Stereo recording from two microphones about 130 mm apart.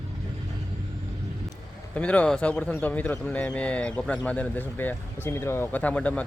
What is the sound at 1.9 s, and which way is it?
Speech, 10° left (ahead or behind).